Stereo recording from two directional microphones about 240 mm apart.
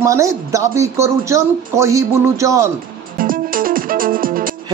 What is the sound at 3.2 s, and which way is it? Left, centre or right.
Music, right.